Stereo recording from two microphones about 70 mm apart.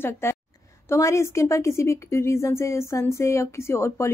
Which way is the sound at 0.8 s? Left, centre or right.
Left.